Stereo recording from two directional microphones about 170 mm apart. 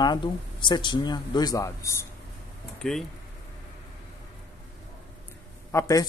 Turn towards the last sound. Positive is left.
turn(degrees=20)  # may be behind; listen again after turning